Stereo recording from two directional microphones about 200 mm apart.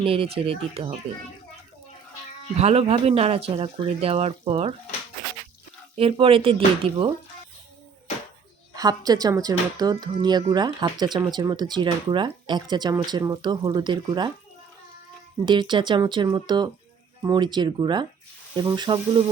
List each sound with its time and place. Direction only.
0.0 s speech: 25° right (ahead or behind)
2.6 s speech: 30° right (ahead or behind)
6.0 s speech: 25° right (ahead or behind)
8.7 s speech: 20° right (ahead or behind)
15.4 s speech: 25° right (ahead or behind)